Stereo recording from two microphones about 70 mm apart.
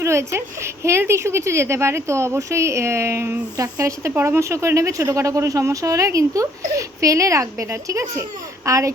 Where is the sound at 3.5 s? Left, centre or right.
Right.